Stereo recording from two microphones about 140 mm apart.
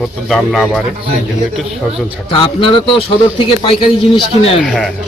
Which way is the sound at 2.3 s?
40° left (ahead or behind).